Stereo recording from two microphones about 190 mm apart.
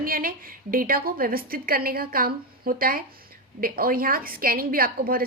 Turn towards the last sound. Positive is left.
turn(degrees=-50)  # may be behind; listen again after turning